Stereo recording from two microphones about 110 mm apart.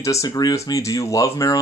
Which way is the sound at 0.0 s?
30° left (ahead or behind).